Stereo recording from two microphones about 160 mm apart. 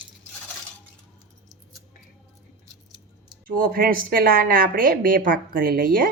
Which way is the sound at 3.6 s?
65° right (ahead or behind).